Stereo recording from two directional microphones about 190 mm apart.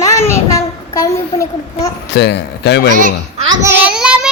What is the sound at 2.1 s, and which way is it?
Speech, 65° left (ahead or behind).